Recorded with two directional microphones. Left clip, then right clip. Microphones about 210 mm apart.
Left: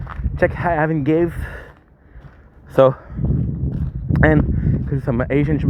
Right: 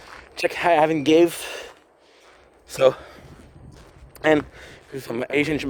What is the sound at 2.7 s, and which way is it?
Speech, 15° right (ahead or behind).